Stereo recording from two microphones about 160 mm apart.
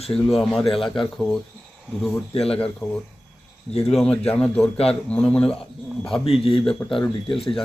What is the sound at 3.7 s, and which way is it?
Speech, 40° left (ahead or behind).